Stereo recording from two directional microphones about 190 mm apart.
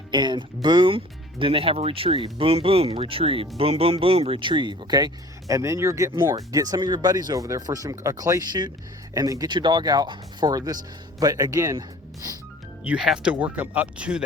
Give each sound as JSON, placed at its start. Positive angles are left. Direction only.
{"t": 0.1, "sound": "speech", "side_deg": -25}
{"t": 12.8, "sound": "speech", "side_deg": -5}